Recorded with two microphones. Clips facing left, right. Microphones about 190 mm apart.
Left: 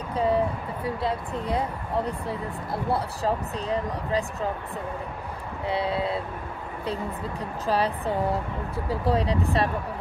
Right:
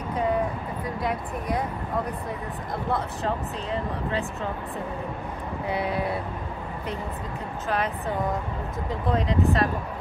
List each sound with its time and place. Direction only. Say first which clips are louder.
0.1 s a sound: left 2 dB; 30° left (ahead or behind)
0.8 s speech: left 2 dB; 30° left (ahead or behind)
2.9 s speech: left 2 dB; 35° left (ahead or behind)
5.7 s speech: left 1 dB; 30° left (ahead or behind)
7.6 s speech: left 3 dB; 35° left (ahead or behind)